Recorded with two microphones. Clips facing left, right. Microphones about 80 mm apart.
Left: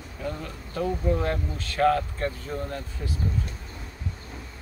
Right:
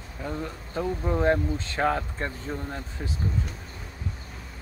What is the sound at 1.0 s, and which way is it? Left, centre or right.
Speech, right.